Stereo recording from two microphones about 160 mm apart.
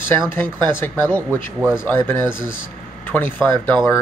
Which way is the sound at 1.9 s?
15° left (ahead or behind).